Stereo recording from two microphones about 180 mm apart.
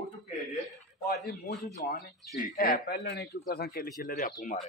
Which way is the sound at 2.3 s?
50° left (ahead or behind).